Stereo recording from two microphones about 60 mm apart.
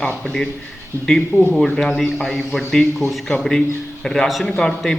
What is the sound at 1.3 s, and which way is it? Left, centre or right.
Speech, left.